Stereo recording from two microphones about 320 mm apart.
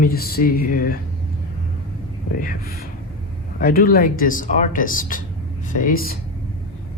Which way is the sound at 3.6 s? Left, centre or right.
Left.